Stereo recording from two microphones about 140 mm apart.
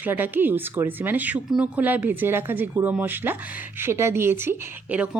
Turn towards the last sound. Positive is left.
turn(degrees=-10)  # may be behind; listen again after turning